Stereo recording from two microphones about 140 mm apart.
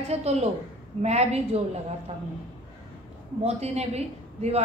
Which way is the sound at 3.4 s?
50° right (ahead or behind).